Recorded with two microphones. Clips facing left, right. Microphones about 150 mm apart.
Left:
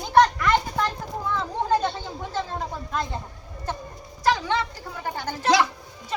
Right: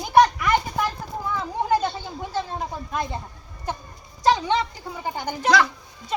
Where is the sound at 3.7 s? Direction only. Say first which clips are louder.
Right 1 dB; 15° right (ahead or behind).